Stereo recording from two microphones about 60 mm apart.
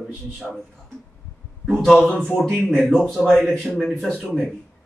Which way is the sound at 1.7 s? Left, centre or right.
Centre.